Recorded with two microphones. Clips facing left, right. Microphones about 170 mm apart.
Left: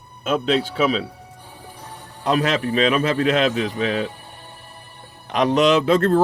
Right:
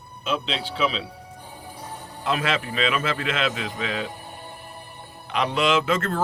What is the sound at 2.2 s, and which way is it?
A man's voice, 40° left (ahead or behind).